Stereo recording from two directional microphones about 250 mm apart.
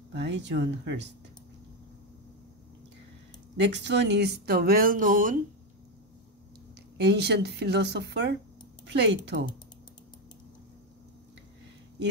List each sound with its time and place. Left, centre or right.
0.1 s speech: right
3.5 s speech: right
7.0 s speech: right